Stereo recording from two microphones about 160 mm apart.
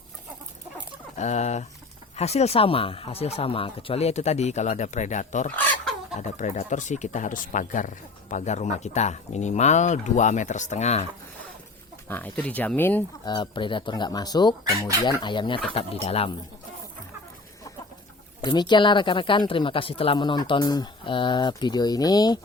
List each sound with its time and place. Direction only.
1.1 s speech: 45° left (ahead or behind)
5.5 s chicken: 5° left (ahead or behind)
6.1 s speech: 45° left (ahead or behind)
12.0 s speech: 10° left (ahead or behind)
13.2 s speech: 30° left (ahead or behind)
18.4 s speech: 30° left (ahead or behind)